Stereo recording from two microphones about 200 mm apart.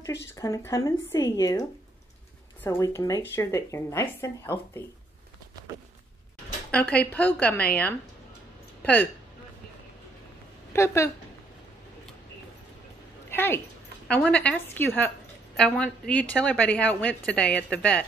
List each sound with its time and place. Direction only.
0.4 s a woman's voice: 15° left (ahead or behind)
6.7 s a woman's voice: 5° left (ahead or behind)
10.7 s a woman's voice: 15° left (ahead or behind)
13.3 s a sound: 10° left (ahead or behind)
14.0 s a woman's voice: 5° left (ahead or behind)